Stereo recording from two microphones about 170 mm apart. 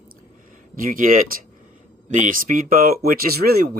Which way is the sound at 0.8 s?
55° right (ahead or behind).